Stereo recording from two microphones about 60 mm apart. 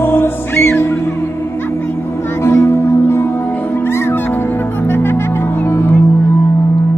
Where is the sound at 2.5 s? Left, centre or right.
Left.